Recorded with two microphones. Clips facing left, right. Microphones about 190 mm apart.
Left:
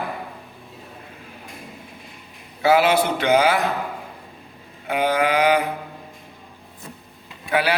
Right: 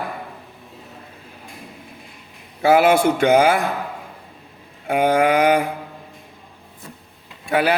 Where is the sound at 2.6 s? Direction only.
50° right (ahead or behind).